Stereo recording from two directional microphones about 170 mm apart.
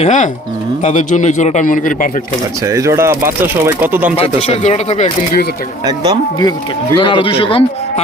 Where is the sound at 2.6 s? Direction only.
15° right (ahead or behind).